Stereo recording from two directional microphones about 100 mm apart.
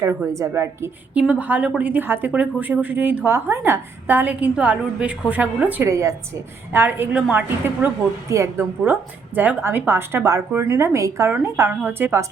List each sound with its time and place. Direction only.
0.3 s a woman's voice: 30° right (ahead or behind)
1.3 s a woman's voice: 15° right (ahead or behind)
5.8 s a woman's voice: 30° right (ahead or behind)
6.7 s a woman's voice: 20° right (ahead or behind)